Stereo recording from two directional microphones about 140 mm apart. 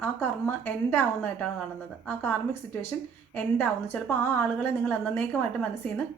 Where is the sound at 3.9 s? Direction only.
10° left (ahead or behind).